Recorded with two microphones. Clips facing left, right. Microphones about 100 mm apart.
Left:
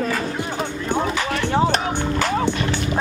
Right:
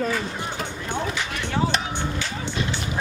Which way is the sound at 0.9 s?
50° left (ahead or behind).